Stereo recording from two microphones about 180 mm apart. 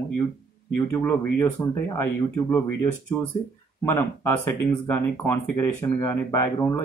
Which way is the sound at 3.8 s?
15° left (ahead or behind).